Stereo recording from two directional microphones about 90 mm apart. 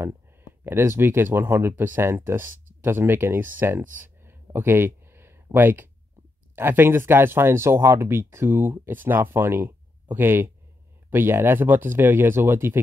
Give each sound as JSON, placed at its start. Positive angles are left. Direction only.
{"t": 0.0, "sound": "speech", "side_deg": -25}